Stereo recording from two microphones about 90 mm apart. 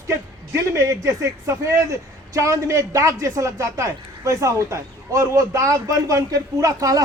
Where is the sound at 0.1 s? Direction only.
35° right (ahead or behind).